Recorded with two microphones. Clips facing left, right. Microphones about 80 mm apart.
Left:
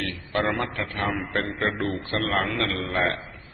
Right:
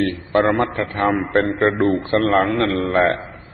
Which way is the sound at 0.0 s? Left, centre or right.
Right.